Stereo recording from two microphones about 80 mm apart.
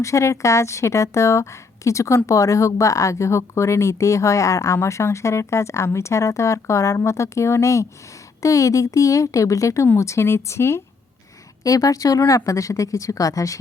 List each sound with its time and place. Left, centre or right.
0.0 s a woman's voice: left
11.6 s a woman's voice: left